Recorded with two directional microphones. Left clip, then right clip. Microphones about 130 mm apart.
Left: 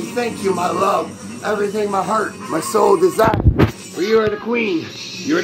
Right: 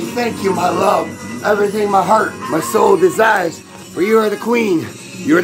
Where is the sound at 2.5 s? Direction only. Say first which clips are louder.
Right 2 dB; 15° left (ahead or behind).